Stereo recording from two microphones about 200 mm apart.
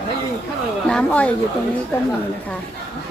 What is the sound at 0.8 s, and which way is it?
Speech, 5° left (ahead or behind).